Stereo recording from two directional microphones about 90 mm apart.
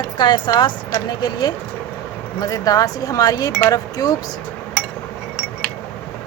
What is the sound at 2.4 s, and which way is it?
Speech, 40° left (ahead or behind).